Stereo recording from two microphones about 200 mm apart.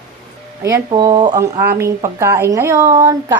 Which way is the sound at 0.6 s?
20° right (ahead or behind).